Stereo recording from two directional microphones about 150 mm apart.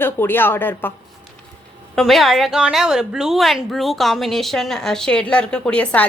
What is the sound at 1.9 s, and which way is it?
A woman's voice, centre (ahead or behind).